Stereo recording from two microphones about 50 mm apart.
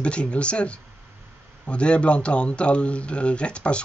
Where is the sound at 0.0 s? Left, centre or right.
Left.